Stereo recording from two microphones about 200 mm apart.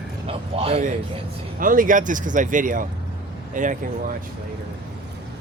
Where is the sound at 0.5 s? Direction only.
30° right (ahead or behind).